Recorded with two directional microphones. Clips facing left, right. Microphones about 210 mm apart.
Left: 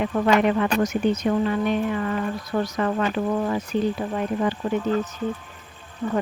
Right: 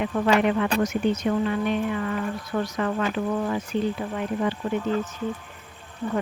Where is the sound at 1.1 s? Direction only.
40° left (ahead or behind).